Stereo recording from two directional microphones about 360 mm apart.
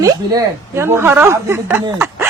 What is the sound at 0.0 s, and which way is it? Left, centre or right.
A woman's voice, centre.